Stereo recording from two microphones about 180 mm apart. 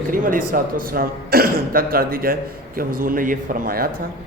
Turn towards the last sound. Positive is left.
turn(degrees=-50)  # may be behind; listen again after turning